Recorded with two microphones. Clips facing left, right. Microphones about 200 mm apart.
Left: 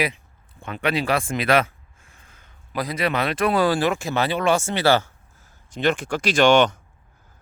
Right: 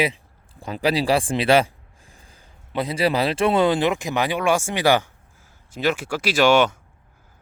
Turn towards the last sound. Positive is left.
turn(degrees=-5)  # may be behind; listen again after turning